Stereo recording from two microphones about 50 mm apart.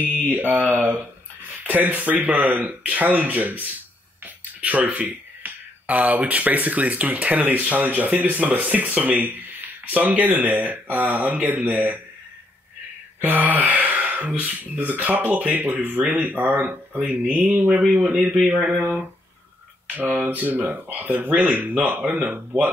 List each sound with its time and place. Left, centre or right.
0.6 s speech: right
13.2 s speech: right
17.1 s mantra: right
17.6 s speech: right
20.6 s speech: right
22.3 s speech: right